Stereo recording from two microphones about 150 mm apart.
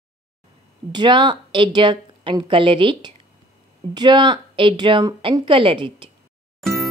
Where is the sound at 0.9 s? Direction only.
30° right (ahead or behind).